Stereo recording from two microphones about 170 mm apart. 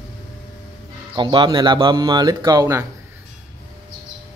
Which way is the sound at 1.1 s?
30° right (ahead or behind).